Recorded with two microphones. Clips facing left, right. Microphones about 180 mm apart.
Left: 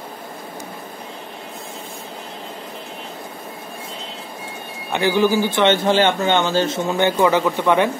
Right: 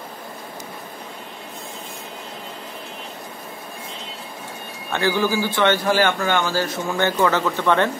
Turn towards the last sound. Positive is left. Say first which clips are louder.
# left 2 dB
turn(degrees=15)  # may be behind; listen again after turning